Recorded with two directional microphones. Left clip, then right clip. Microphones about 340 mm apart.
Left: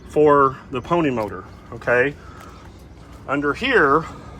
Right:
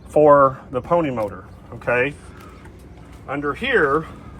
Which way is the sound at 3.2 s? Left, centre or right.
Centre.